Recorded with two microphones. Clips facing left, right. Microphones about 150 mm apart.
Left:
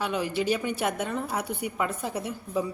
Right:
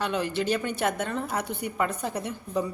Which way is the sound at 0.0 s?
5° left (ahead or behind).